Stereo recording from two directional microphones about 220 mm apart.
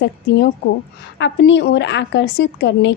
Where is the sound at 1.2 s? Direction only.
55° left (ahead or behind).